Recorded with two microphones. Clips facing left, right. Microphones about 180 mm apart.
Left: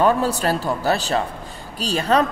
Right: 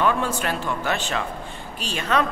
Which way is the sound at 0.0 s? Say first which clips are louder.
Left 5 dB; 35° left (ahead or behind).